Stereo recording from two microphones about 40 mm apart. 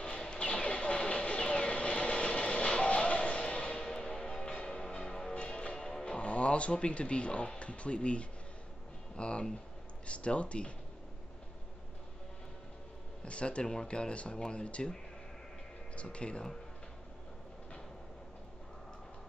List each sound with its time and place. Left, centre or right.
0.0 s a sound: left
3.7 s music: centre
5.3 s music: left
6.1 s speech: left
13.2 s speech: left
16.0 s speech: left